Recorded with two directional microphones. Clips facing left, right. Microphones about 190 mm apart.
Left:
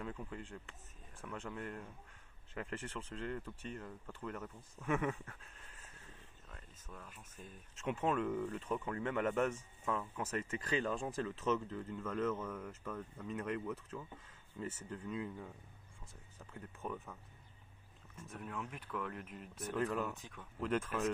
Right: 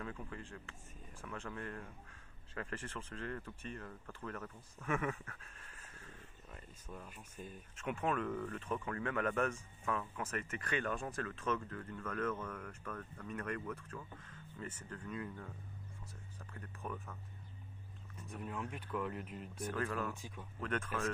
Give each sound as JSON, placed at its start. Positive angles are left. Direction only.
{"t": 0.0, "sound": "speech", "side_deg": 15}
{"t": 6.5, "sound": "speech", "side_deg": -10}
{"t": 7.8, "sound": "speech", "side_deg": 25}
{"t": 16.8, "sound": "speech", "side_deg": 5}
{"t": 18.3, "sound": "speech", "side_deg": 0}